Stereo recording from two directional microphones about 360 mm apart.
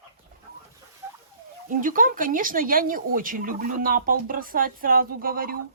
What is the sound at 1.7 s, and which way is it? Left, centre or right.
Speech, right.